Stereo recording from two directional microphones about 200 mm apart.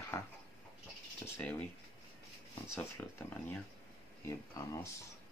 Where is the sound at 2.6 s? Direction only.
10° left (ahead or behind).